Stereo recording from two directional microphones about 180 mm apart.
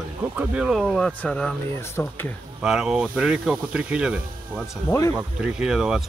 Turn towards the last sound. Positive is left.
turn(degrees=-5)  # may be behind; listen again after turning